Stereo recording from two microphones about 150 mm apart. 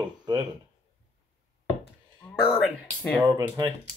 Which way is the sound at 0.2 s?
25° right (ahead or behind).